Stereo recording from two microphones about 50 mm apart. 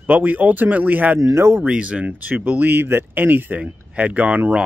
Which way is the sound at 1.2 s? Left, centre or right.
Right.